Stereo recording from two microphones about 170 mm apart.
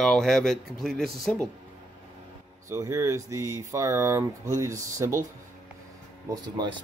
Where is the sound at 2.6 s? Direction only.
20° right (ahead or behind).